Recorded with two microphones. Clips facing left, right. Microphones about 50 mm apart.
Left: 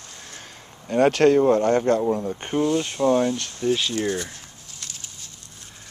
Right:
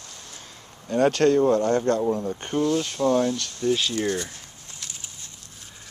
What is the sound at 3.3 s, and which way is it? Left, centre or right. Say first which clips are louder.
Speech: left 1 dB; left.